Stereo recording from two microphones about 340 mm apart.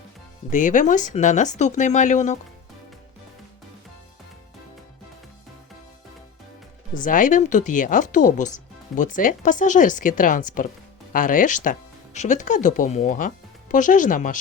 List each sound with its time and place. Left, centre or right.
0.5 s speech: left
6.9 s speech: left